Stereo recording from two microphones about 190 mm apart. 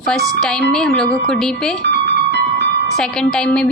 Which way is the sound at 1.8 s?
65° right (ahead or behind).